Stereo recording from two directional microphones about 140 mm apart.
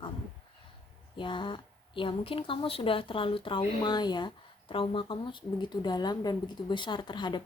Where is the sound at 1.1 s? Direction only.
35° left (ahead or behind).